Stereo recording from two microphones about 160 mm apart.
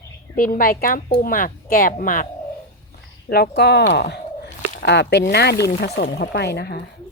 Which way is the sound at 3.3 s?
85° left.